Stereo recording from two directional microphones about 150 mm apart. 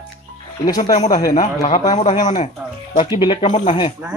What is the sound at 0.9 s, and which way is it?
Speech, 50° left (ahead or behind).